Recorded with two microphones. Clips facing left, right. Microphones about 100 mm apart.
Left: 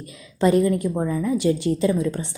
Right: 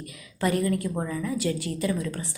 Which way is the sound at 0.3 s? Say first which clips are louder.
Left 7 dB; 25° left (ahead or behind).